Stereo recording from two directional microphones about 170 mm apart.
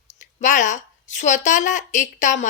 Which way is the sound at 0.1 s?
45° left (ahead or behind).